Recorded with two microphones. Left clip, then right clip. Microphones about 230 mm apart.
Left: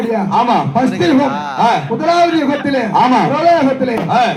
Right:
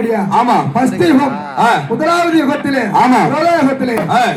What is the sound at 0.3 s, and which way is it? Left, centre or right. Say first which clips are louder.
A man's voice: right 1 dB; right.